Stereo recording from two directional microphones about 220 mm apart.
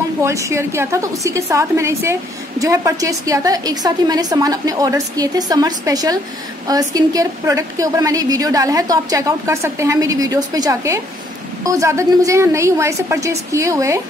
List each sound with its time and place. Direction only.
0.2 s a woman's voice: 15° right (ahead or behind)